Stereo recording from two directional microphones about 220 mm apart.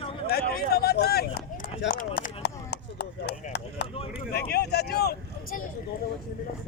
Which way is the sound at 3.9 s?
25° left (ahead or behind).